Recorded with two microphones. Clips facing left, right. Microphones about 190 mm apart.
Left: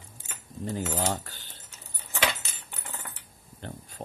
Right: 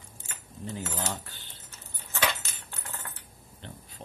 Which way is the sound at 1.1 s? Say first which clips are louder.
Left 5 dB; 45° left (ahead or behind).